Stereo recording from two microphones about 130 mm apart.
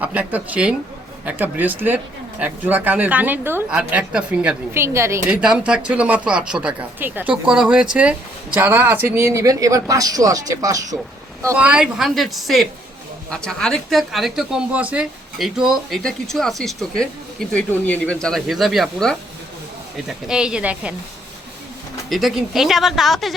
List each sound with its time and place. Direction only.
0.0 s speech: 10° right (ahead or behind)
4.8 s speech: 20° right (ahead or behind)
5.3 s speech: 5° right (ahead or behind); by 10.8 s 25° right (ahead or behind)
11.5 s speech: 10° right (ahead or behind)
22.1 s speech: centre (ahead or behind)